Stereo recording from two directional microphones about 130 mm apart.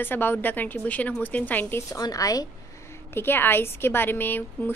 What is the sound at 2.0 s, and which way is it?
Speech, 30° left (ahead or behind).